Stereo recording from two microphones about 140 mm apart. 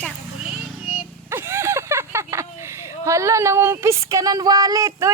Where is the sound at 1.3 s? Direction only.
20° right (ahead or behind).